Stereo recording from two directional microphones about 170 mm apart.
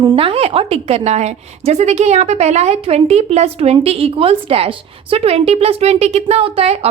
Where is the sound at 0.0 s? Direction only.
30° right (ahead or behind).